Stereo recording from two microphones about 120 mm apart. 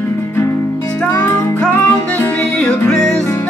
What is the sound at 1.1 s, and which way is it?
Music, 20° left (ahead or behind).